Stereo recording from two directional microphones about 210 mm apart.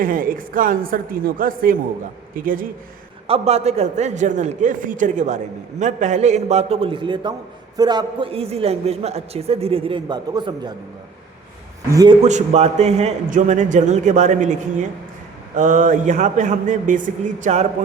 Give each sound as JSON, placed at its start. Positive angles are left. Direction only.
{"t": 0.0, "sound": "a man's voice", "side_deg": -40}
{"t": 3.2, "sound": "a man's voice", "side_deg": -30}
{"t": 11.9, "sound": "a man's voice", "side_deg": -15}
{"t": 12.2, "sound": "a man's voice", "side_deg": -30}